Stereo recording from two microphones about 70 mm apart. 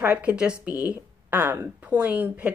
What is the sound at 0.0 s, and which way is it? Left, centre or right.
Speech, right.